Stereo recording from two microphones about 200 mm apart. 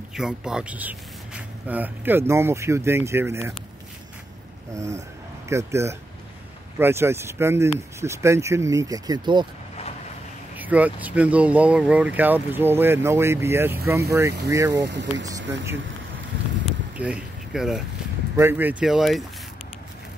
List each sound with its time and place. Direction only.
0.1 s speech: 5° right (ahead or behind)
5.5 s speech: 15° right (ahead or behind)
10.5 s speech: 10° right (ahead or behind)
14.9 s speech: 60° right (ahead or behind)
15.2 s speech: 15° right (ahead or behind)
16.9 s speech: 5° right (ahead or behind)